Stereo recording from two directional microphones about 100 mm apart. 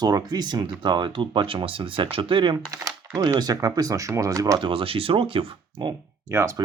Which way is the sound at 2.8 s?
35° right (ahead or behind).